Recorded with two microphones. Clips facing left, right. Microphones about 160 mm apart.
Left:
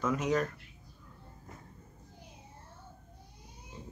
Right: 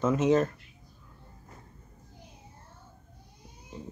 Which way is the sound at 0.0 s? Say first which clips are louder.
Right 6 dB; 25° right (ahead or behind).